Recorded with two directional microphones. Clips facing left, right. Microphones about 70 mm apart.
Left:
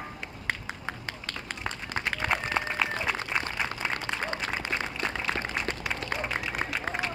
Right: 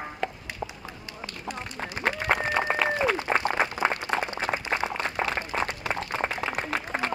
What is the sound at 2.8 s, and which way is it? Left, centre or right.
Applause, right.